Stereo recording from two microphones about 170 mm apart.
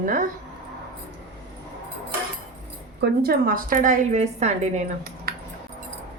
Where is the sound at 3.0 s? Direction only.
65° right (ahead or behind); by 4.8 s 45° right (ahead or behind).